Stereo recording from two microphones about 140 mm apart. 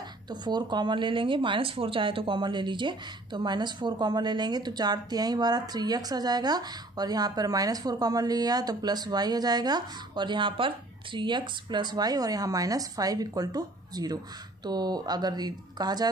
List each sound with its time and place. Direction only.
0.3 s speech: 30° right (ahead or behind)